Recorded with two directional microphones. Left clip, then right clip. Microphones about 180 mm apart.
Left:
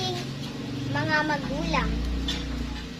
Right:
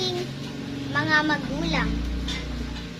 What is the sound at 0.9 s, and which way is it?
Speech, 15° right (ahead or behind).